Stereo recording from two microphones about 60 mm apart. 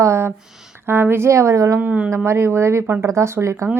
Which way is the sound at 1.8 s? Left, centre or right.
Right.